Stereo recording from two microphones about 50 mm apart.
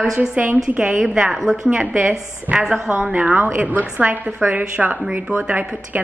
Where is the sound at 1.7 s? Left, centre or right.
Right.